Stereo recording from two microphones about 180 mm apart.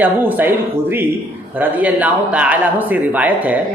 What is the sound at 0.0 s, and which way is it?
A woman's voice, 10° right (ahead or behind).